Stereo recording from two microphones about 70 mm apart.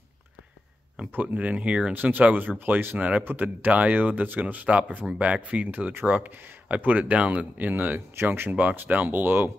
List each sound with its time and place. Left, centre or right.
0.9 s speech: right